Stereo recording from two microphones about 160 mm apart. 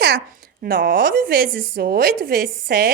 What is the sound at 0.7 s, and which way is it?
A woman's voice, 60° right (ahead or behind).